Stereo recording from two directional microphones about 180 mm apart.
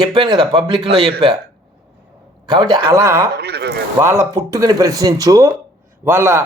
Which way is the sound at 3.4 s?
65° right (ahead or behind).